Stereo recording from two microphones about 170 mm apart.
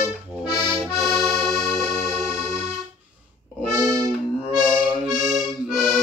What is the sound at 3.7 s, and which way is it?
Music, 20° right (ahead or behind).